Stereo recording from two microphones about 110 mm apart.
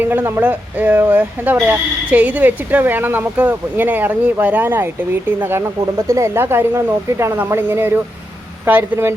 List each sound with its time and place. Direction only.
0.0 s speech: 20° right (ahead or behind)